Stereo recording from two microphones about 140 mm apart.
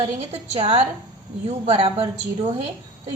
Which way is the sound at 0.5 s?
40° right (ahead or behind).